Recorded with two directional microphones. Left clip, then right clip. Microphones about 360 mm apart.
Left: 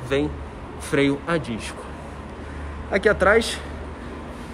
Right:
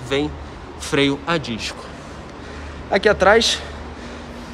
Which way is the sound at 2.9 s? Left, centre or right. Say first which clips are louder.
Right 4 dB; centre.